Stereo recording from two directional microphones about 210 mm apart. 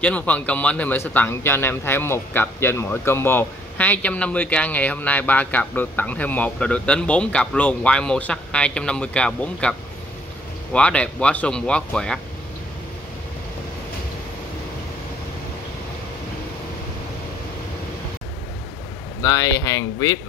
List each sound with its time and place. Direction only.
0.0 s a man's voice: 5° left (ahead or behind)
19.2 s a man's voice: 15° left (ahead or behind)